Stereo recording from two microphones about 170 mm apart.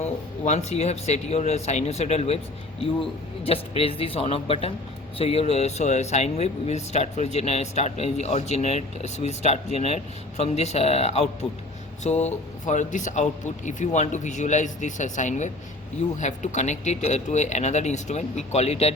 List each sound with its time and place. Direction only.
0.0 s speech: 40° left (ahead or behind)